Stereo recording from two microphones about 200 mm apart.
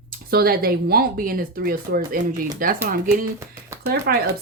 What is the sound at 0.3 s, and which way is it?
Speech, 50° right (ahead or behind).